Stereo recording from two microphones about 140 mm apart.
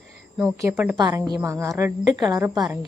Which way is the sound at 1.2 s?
20° right (ahead or behind).